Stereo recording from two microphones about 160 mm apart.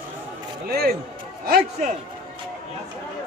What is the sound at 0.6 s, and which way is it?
Speech, 75° right (ahead or behind).